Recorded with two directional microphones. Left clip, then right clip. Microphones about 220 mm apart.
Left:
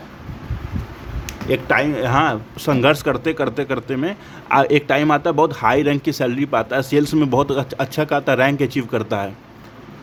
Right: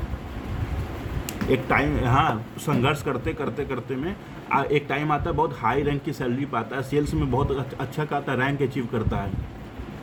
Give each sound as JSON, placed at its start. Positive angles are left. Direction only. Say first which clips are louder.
{"t": 1.5, "sound": "speech", "louder": "left 5 dB", "side_deg": 50}